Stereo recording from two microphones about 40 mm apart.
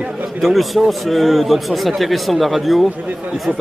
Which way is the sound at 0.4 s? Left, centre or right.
Centre.